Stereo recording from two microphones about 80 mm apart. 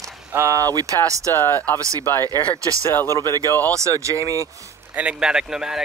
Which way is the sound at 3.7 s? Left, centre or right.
Right.